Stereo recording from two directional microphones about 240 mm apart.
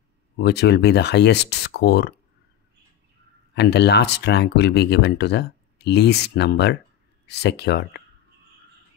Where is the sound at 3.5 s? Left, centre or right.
Left.